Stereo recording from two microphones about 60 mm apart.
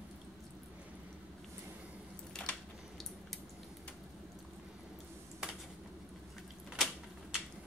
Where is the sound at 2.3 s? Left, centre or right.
Centre.